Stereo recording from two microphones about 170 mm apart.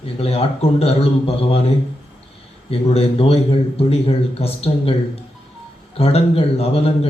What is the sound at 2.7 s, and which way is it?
Speech, 35° left (ahead or behind).